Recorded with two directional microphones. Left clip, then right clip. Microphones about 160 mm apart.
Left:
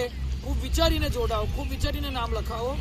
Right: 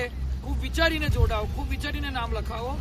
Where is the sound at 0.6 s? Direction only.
Centre (ahead or behind).